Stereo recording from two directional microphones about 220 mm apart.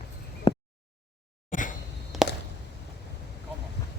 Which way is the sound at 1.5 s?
35° left (ahead or behind).